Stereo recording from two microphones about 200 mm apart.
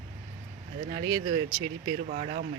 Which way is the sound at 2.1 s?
40° right (ahead or behind).